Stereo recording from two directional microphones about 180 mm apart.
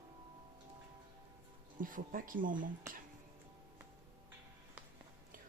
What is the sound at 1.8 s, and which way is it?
Speech, 50° right (ahead or behind).